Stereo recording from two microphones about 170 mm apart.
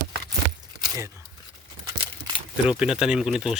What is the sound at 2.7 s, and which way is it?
Speech, 5° right (ahead or behind).